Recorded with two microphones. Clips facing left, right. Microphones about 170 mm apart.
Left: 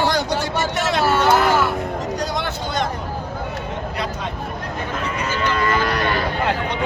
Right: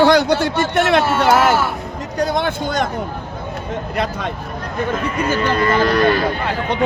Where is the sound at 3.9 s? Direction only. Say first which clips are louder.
Right 8 dB; 55° right (ahead or behind).